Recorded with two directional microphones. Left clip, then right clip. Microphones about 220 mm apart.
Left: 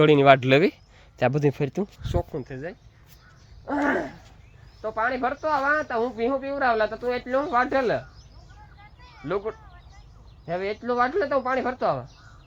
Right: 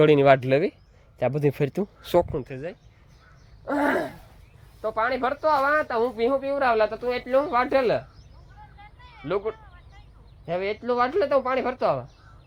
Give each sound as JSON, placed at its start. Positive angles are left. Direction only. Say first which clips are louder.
{"t": 0.0, "sound": "speech", "louder": "left 1 dB", "side_deg": 5}
{"t": 0.3, "sound": "speech", "louder": "left 3 dB", "side_deg": 15}
{"t": 1.2, "sound": "speech", "louder": "left 1 dB", "side_deg": 5}
{"t": 1.5, "sound": "speech", "louder": "right 2 dB", "side_deg": -5}
{"t": 3.7, "sound": "a sound", "louder": "right 1 dB", "side_deg": -15}
{"t": 4.8, "sound": "speech", "louder": "right 1 dB", "side_deg": 0}
{"t": 8.8, "sound": "a sound", "louder": "right 1 dB", "side_deg": -45}
{"t": 9.2, "sound": "speech", "louder": "right 1 dB", "side_deg": 0}